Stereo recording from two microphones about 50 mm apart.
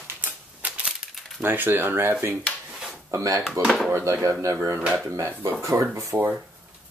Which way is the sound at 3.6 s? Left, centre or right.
Right.